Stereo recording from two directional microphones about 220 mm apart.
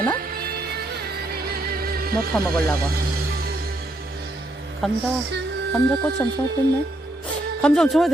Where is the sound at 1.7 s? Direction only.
40° right (ahead or behind).